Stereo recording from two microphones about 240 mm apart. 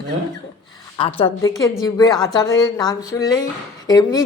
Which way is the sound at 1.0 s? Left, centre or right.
Left.